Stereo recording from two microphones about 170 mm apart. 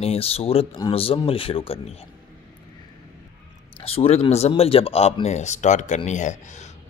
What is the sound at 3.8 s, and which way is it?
Speech, 35° left (ahead or behind).